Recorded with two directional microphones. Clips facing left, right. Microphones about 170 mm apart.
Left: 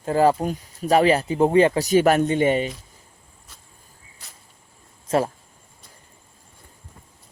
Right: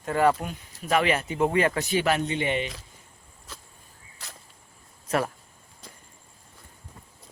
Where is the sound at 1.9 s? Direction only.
45° left (ahead or behind).